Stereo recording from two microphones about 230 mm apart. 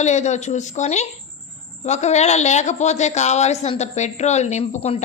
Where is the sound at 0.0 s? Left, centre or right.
Left.